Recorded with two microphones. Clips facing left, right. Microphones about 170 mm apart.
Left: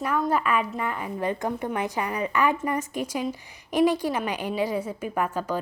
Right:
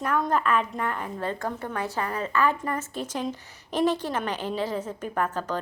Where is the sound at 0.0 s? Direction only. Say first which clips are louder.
Even; 10° left (ahead or behind).